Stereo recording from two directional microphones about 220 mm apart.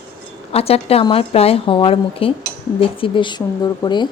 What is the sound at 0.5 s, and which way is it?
A woman's voice, 25° left (ahead or behind).